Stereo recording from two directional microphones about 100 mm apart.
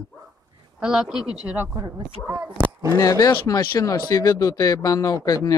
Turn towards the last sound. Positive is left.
turn(degrees=40)  # may be behind; listen again after turning